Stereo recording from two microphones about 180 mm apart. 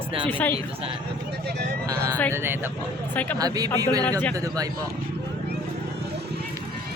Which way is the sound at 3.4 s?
20° right (ahead or behind).